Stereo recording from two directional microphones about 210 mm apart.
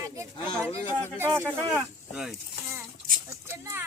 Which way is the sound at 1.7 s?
Centre (ahead or behind).